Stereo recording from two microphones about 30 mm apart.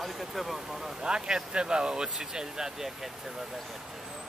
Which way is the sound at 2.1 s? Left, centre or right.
Centre.